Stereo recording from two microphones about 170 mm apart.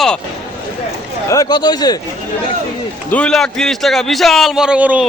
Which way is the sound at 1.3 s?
20° left (ahead or behind).